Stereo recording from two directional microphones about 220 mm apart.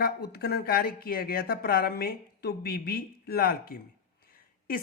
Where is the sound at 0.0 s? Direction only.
45° left (ahead or behind).